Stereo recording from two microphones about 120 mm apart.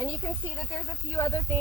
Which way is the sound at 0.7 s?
25° left (ahead or behind).